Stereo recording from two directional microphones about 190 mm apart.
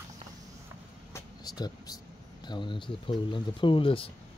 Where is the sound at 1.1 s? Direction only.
20° left (ahead or behind).